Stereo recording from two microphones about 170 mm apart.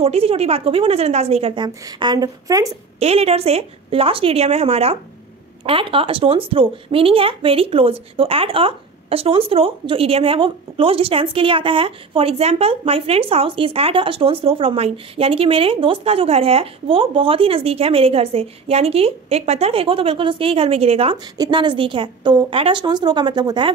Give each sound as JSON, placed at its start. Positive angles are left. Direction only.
{"t": 0.0, "sound": "speech", "side_deg": -35}
{"t": 3.0, "sound": "speech", "side_deg": -35}